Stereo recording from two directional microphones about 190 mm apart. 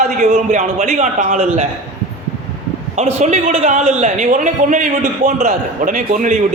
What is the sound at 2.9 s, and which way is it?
A man's voice, 35° right (ahead or behind).